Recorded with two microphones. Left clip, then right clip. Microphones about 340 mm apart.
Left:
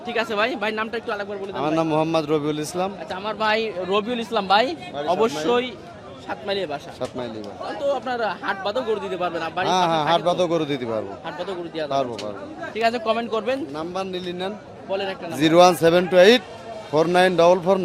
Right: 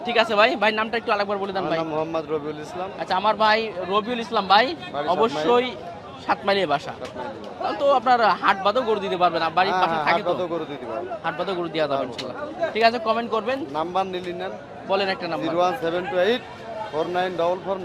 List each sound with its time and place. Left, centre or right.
0.1 s speech: centre
1.6 s a man's voice: left
3.3 s speech: centre
6.2 s speech: centre
9.9 s a man's voice: left
12.9 s speech: centre
13.7 s a man's voice: left
14.8 s a man's voice: centre
15.4 s speech: left